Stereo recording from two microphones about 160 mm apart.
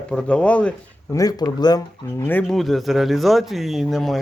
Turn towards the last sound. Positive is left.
turn(degrees=0)  # may be behind; listen again after turning